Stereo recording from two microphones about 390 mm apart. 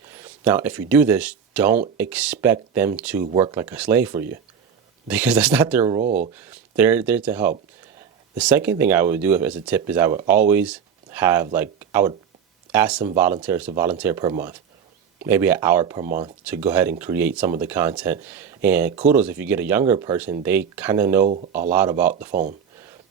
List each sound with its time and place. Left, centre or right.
0.1 s speech: centre
6.3 s speech: centre
22.3 s speech: centre